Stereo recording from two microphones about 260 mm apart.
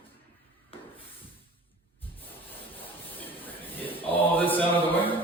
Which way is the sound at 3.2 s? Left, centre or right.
Centre.